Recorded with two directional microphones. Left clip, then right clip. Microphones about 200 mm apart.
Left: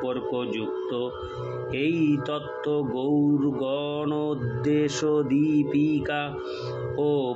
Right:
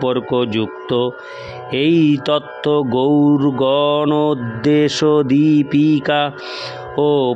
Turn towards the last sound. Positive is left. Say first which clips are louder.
# right 9 dB
turn(degrees=-55)  # may be behind; listen again after turning